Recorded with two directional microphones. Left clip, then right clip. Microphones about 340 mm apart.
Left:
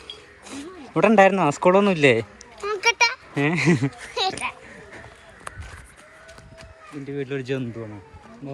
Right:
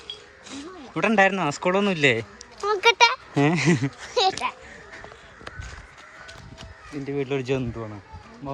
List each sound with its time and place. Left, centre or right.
0.4 s speech: centre
2.8 s a sound: right
3.3 s a child's voice: centre
7.1 s speech: centre